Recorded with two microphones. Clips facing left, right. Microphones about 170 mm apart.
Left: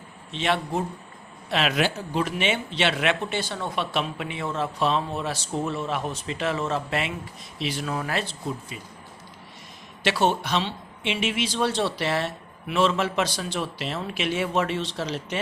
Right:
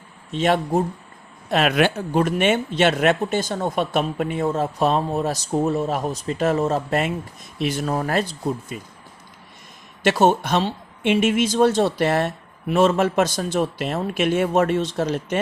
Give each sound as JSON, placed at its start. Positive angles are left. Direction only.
{"t": 0.3, "sound": "speech", "side_deg": -45}
{"t": 10.0, "sound": "speech", "side_deg": -45}